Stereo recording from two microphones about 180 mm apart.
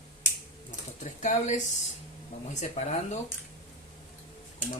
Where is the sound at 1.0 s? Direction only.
40° left (ahead or behind).